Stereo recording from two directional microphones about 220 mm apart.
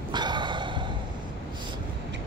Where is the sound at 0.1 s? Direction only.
20° right (ahead or behind).